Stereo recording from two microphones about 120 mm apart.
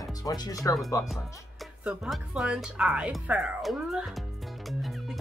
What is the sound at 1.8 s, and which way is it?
Speech, 5° right (ahead or behind).